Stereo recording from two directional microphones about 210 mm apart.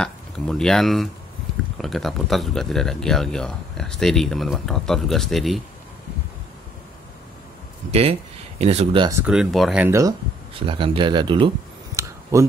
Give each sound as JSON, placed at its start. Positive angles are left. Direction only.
{"t": 0.0, "sound": "speech", "side_deg": 5}
{"t": 7.9, "sound": "speech", "side_deg": -30}
{"t": 9.2, "sound": "speech", "side_deg": -5}
{"t": 10.6, "sound": "speech", "side_deg": -25}